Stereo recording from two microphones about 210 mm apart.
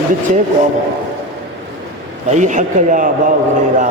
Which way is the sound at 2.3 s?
35° right (ahead or behind).